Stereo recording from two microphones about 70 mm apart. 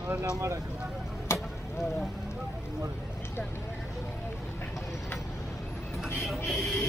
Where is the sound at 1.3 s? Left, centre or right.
Left.